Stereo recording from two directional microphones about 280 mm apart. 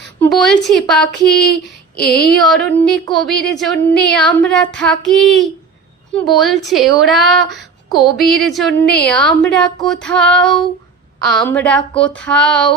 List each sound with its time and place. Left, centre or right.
0.2 s speech: centre
2.0 s a sound: left
2.3 s speech: centre